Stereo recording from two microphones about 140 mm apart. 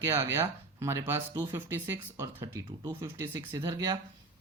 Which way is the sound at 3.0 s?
15° right (ahead or behind).